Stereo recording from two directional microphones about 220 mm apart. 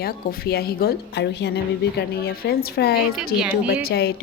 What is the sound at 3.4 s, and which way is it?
Speech, 5° right (ahead or behind).